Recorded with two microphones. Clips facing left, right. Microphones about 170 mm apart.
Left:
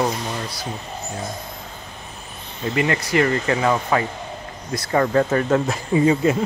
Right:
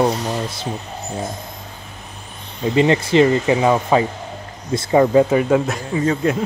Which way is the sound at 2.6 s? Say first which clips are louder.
Right 6 dB; 25° right (ahead or behind).